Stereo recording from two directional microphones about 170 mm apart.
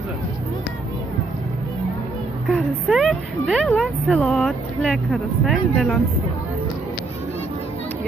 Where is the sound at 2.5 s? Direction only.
Centre (ahead or behind).